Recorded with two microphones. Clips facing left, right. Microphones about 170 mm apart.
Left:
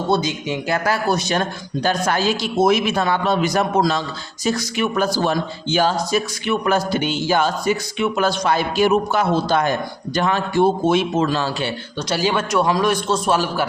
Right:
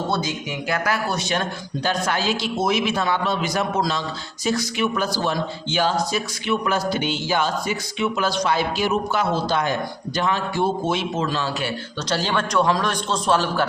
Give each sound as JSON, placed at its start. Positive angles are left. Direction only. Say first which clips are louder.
{"t": 0.1, "sound": "speech", "louder": "left 5 dB", "side_deg": 20}
{"t": 0.9, "sound": "speech", "louder": "left 6 dB", "side_deg": 40}
{"t": 12.0, "sound": "a man's voice", "louder": "left 3 dB", "side_deg": 10}